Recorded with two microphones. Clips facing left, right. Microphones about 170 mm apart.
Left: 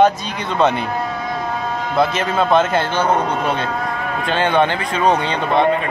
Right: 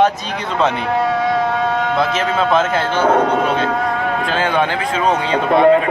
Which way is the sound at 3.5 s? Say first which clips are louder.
Right 4 dB; 75° right (ahead or behind).